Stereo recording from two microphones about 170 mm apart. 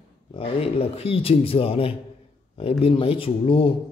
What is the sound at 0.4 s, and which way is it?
A man's voice, 35° left (ahead or behind).